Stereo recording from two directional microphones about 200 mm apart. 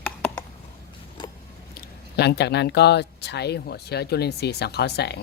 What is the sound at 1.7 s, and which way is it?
Speech, 55° left (ahead or behind).